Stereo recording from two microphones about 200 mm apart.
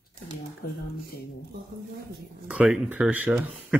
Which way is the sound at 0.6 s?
50° left (ahead or behind).